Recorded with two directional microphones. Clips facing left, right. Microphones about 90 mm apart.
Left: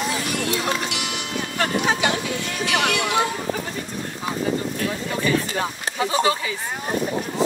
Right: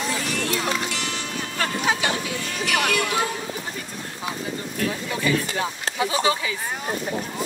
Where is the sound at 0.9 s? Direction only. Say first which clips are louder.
Left 1 dB; 15° left (ahead or behind).